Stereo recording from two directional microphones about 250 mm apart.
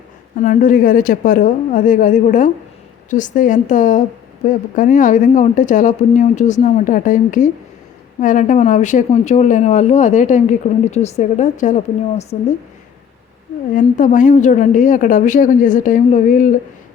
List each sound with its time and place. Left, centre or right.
0.3 s a woman's voice: left
13.7 s speech: left